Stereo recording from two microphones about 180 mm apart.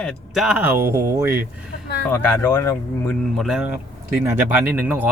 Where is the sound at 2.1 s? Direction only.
10° left (ahead or behind).